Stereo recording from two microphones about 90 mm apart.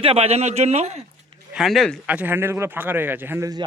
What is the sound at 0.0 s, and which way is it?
Speech, 90° right.